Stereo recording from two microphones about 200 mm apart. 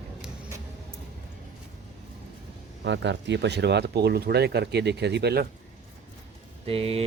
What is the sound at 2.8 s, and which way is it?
Speech, 65° right (ahead or behind).